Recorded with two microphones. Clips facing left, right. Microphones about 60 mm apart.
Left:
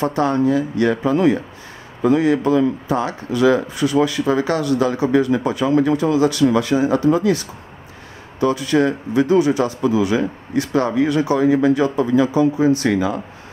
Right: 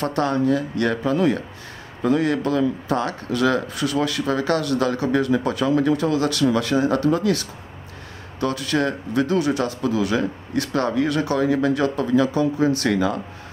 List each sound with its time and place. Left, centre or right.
0.0 s speech: centre